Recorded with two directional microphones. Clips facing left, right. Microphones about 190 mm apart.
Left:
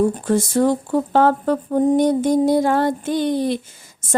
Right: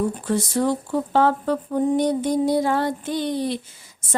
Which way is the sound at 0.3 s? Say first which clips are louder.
Left 2 dB; 45° left (ahead or behind).